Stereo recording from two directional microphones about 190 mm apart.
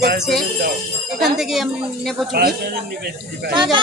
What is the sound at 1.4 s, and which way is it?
Speech, centre (ahead or behind).